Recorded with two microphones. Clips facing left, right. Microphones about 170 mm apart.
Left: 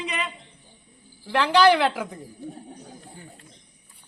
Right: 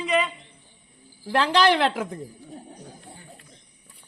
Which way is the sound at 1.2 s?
45° right (ahead or behind).